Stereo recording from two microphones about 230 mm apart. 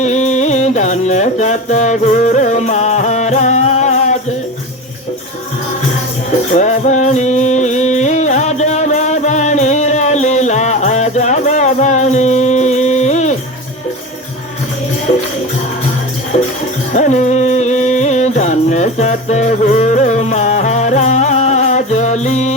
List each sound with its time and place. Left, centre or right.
0.0 s music: left
6.6 s music: left
16.9 s music: left